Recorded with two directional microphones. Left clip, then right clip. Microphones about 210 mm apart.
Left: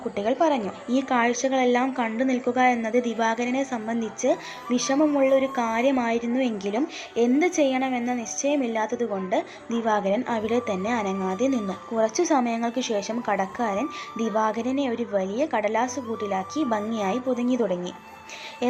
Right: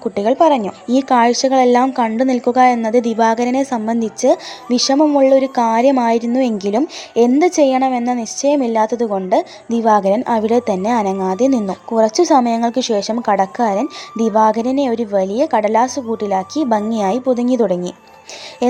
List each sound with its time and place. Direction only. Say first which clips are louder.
0.2 s a woman's voice: right 10 dB; 40° right (ahead or behind)